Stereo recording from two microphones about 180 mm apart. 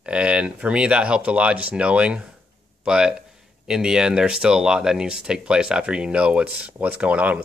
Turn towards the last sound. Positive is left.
turn(degrees=-5)  # may be behind; listen again after turning